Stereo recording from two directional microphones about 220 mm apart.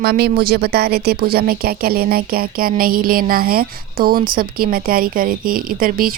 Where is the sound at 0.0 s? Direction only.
50° right (ahead or behind).